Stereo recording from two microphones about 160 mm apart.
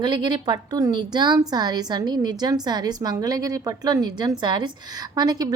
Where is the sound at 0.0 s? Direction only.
30° right (ahead or behind).